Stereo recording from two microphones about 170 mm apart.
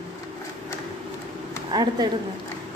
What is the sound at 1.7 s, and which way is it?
Speech, 20° right (ahead or behind).